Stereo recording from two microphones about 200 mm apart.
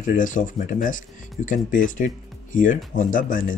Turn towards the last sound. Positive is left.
turn(degrees=40)  # may be behind; listen again after turning